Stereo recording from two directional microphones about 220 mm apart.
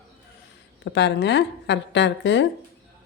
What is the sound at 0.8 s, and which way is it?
A woman's voice, 50° left (ahead or behind).